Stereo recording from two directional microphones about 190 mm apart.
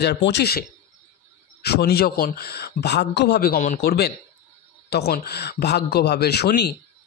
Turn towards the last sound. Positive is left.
turn(degrees=60)  # may be behind; listen again after turning